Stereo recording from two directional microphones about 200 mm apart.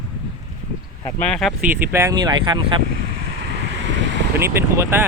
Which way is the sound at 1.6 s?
10° right (ahead or behind).